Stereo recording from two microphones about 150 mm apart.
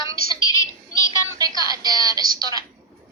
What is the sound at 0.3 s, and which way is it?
Child singing, 25° left (ahead or behind).